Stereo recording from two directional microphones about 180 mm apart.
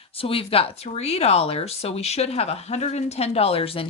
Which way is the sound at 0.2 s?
30° left (ahead or behind).